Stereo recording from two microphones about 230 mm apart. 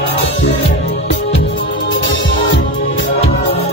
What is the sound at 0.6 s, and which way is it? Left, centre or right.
Music, left.